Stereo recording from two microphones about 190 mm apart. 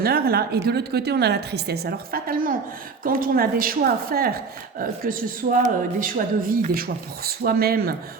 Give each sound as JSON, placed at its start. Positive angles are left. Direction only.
{"t": 0.0, "sound": "a woman's voice", "side_deg": -55}